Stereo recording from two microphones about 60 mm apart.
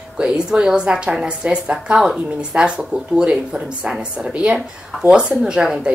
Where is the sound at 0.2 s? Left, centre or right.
Centre.